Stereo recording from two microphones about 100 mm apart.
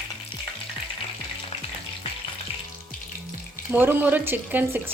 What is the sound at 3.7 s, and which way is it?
Speech, 20° right (ahead or behind).